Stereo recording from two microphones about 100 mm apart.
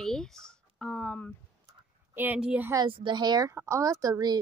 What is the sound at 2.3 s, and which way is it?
Speech, 10° right (ahead or behind).